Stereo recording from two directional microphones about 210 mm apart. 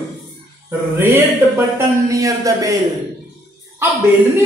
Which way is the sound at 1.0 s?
10° right (ahead or behind).